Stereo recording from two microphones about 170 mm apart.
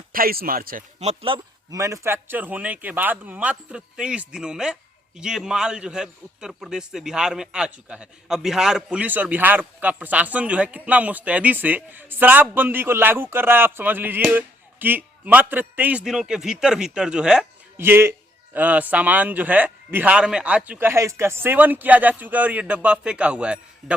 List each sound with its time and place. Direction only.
0.1 s speech: 60° right (ahead or behind)
0.9 s speech: 35° right (ahead or behind)
1.7 s a man's voice: 20° right (ahead or behind)